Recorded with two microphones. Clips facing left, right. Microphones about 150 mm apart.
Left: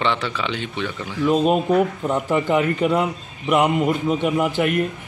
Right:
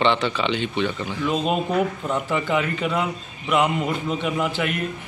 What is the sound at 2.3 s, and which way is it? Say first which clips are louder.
Speech: left 5 dB; 45° left (ahead or behind).